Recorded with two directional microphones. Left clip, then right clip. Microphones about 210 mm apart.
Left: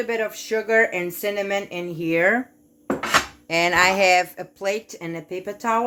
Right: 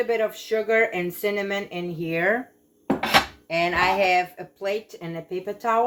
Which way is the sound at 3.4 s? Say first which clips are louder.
Left 3 dB; 60° left (ahead or behind).